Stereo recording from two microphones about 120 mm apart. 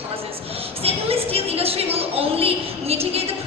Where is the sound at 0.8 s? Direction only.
55° right (ahead or behind).